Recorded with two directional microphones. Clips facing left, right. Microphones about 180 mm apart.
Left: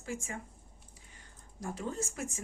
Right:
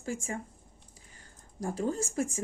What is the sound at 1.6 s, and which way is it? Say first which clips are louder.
Speech: right 6 dB; 35° right (ahead or behind).